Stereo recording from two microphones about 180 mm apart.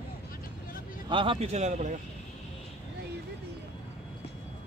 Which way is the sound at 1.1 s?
30° right (ahead or behind).